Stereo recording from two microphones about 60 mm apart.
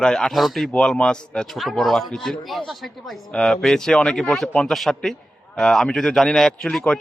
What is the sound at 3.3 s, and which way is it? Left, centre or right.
Speech, centre.